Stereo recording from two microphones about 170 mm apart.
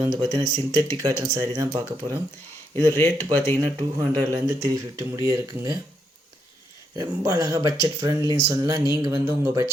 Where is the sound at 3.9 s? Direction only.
15° right (ahead or behind).